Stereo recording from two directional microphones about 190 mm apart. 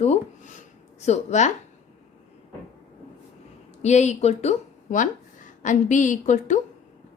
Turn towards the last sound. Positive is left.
turn(degrees=40)  # may be behind; listen again after turning